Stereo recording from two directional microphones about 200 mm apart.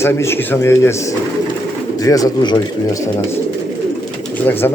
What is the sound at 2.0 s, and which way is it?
Speech, 15° left (ahead or behind).